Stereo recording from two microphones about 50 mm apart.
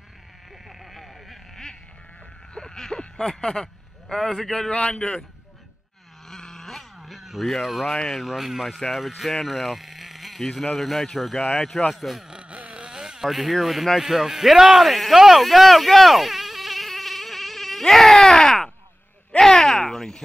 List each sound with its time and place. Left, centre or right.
0.7 s a sound: centre
4.1 s a man's voice: centre
6.2 s a sound: centre
7.6 s speech: centre
7.9 s a man's voice: centre
8.2 s speech: centre
12.3 s vehicle: right
13.3 s speech: centre
19.3 s a sound: centre